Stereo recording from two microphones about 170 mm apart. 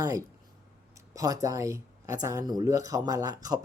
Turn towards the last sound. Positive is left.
turn(degrees=-20)  # may be behind; listen again after turning